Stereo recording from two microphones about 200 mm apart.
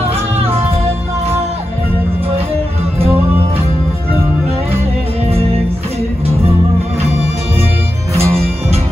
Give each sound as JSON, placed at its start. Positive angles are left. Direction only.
{"t": 8.1, "sound": "music", "side_deg": -30}